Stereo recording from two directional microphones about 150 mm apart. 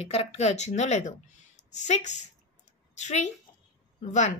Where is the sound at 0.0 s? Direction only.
45° left (ahead or behind).